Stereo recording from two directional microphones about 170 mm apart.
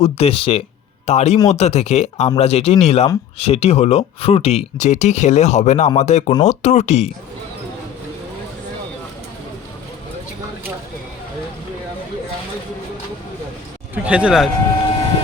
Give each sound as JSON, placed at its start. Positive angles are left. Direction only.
{"t": 0.0, "sound": "speech", "side_deg": 35}
{"t": 13.9, "sound": "speech", "side_deg": -10}